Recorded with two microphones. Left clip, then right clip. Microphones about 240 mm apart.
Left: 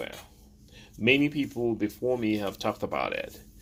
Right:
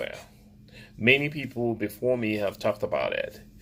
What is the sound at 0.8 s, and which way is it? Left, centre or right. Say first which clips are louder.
Speech: right 2 dB; left.